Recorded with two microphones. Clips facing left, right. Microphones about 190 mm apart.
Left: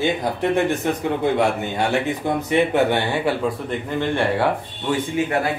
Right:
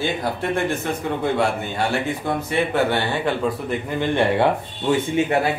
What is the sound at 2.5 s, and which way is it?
Speech, 15° left (ahead or behind).